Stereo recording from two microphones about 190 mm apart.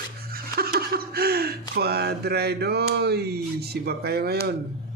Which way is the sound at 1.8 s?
55° right (ahead or behind).